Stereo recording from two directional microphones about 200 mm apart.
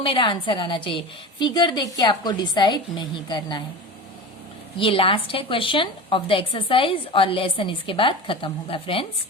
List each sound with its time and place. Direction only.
0.0 s a woman's voice: 25° left (ahead or behind)
4.8 s a woman's voice: 25° left (ahead or behind)